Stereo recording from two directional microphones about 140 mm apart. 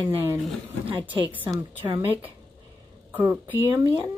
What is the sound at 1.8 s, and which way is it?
A woman's voice, 15° right (ahead or behind).